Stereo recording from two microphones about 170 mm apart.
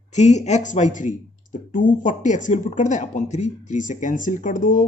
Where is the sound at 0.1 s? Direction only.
40° left (ahead or behind).